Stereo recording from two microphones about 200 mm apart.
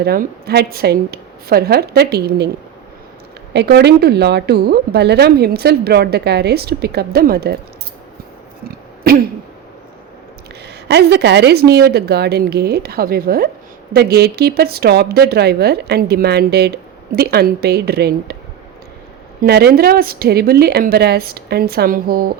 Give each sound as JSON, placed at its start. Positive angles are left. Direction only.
{"t": 0.0, "sound": "a woman's voice", "side_deg": -50}
{"t": 3.5, "sound": "a woman's voice", "side_deg": -55}
{"t": 9.1, "sound": "a woman's voice", "side_deg": -50}
{"t": 10.8, "sound": "a woman's voice", "side_deg": -60}
{"t": 19.4, "sound": "a woman's voice", "side_deg": -50}